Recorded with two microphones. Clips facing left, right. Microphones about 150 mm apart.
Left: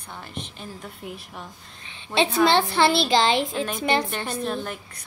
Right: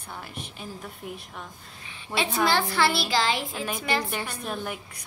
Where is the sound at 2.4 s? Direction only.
25° left (ahead or behind).